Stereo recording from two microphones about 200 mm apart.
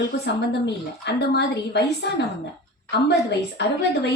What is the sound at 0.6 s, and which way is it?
A woman's voice, 55° left (ahead or behind).